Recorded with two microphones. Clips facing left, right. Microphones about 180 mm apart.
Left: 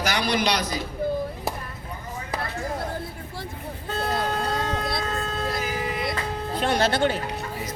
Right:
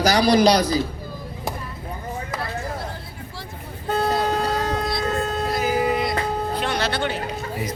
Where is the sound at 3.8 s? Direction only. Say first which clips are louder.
Right 5 dB; 35° right (ahead or behind).